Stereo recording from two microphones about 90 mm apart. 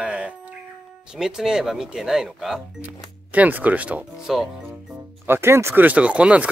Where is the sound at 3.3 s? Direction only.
20° right (ahead or behind).